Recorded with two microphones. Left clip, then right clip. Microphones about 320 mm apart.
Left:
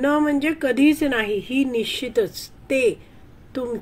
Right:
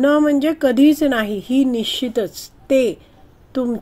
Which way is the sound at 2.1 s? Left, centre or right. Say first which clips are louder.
Even; right.